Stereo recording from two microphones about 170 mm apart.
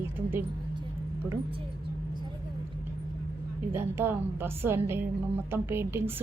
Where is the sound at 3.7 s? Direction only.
15° right (ahead or behind).